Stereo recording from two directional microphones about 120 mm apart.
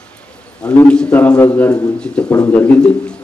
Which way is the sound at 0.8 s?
10° left (ahead or behind).